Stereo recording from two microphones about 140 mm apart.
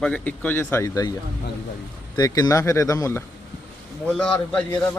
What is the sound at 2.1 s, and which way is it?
Speech, 30° left (ahead or behind).